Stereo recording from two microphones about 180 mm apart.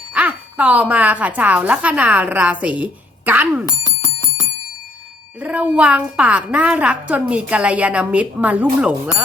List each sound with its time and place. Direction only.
0.1 s a woman's voice: 5° right (ahead or behind)
3.7 s bicycle bell: 20° left (ahead or behind)
5.4 s a woman's voice: 10° right (ahead or behind)